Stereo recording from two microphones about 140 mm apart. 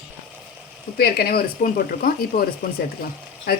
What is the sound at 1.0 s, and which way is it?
Speech, 90° left.